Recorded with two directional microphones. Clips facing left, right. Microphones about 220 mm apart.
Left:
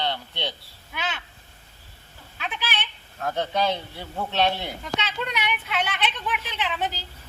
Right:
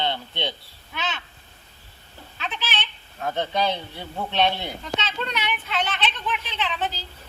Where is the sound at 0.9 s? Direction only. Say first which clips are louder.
Right 1 dB; 10° left (ahead or behind).